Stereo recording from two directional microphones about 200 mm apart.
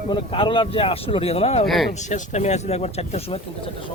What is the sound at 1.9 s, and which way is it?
Speech, 35° left (ahead or behind).